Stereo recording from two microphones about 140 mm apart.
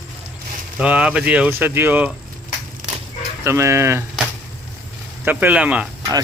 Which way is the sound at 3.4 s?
20° right (ahead or behind).